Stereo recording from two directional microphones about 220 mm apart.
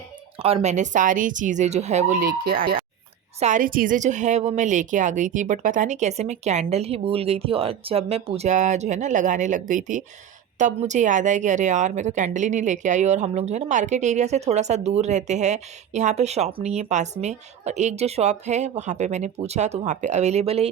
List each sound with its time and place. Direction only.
0.3 s a woman's voice: 25° right (ahead or behind)